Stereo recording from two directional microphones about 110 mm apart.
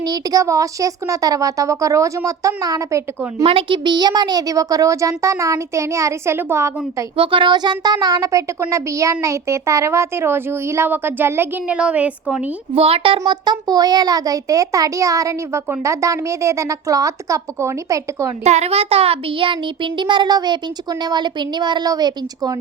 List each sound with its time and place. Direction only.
0.0 s a child's voice: 35° right (ahead or behind)
3.4 s speech: 60° right (ahead or behind)
3.8 s speech: 40° right (ahead or behind); by 6.7 s 25° right (ahead or behind)
7.2 s a child's voice: 50° right (ahead or behind); by 12.4 s 10° right (ahead or behind)
12.7 s a child's voice: 60° right (ahead or behind); by 18.3 s 30° right (ahead or behind)
18.4 s a child's voice: 85° right; by 22.5 s 35° right (ahead or behind)